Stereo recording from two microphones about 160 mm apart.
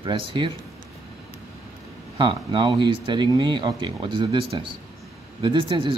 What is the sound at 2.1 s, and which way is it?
A man's voice, 30° right (ahead or behind).